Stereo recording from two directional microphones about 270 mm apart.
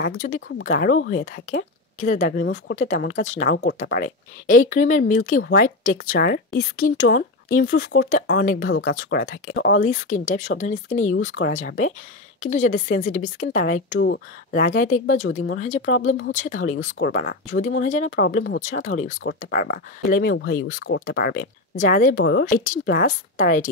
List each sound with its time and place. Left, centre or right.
0.0 s speech: left
18.2 s speech: left
18.6 s speech: left